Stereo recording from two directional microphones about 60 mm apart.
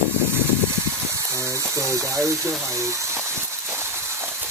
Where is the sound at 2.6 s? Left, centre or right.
Right.